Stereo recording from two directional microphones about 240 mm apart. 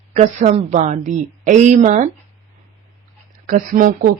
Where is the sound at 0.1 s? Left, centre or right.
Right.